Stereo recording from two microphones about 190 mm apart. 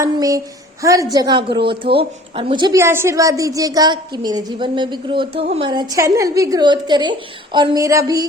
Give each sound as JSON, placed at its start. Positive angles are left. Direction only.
{"t": 0.0, "sound": "a woman's voice", "side_deg": -15}